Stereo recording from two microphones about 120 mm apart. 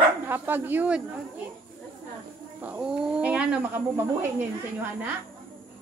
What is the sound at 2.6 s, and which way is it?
A woman's voice, 10° right (ahead or behind).